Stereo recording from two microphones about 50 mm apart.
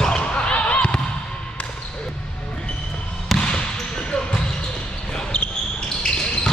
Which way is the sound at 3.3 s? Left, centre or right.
Centre.